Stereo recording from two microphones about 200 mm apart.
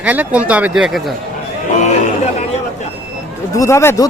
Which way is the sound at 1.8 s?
35° left (ahead or behind).